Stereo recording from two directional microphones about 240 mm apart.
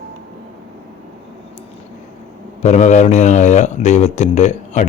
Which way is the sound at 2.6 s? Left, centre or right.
Left.